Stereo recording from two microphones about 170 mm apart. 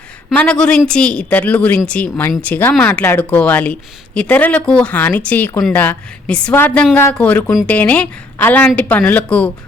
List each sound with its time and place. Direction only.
0.3 s a woman's voice: 5° left (ahead or behind)